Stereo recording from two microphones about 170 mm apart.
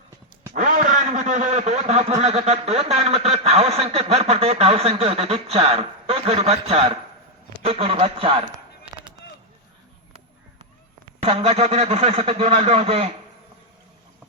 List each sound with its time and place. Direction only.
0.5 s a man's voice: 50° right (ahead or behind); by 8.4 s 30° right (ahead or behind)
11.2 s a man's voice: 35° right (ahead or behind)